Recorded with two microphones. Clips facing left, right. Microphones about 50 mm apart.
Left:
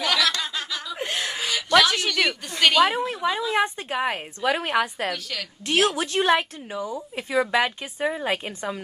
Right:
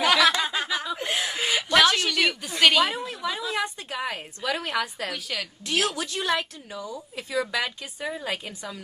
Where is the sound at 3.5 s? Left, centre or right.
Left.